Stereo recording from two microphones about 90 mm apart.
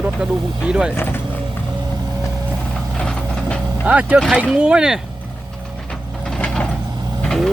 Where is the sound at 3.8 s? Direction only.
15° right (ahead or behind).